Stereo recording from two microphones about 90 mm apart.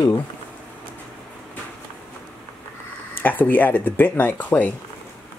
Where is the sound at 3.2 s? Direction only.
20° left (ahead or behind).